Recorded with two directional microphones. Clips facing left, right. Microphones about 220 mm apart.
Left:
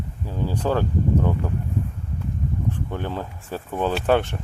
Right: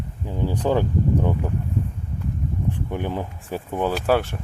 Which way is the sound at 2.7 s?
15° right (ahead or behind).